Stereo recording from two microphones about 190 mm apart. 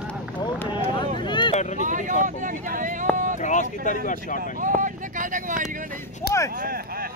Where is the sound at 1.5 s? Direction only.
35° left (ahead or behind).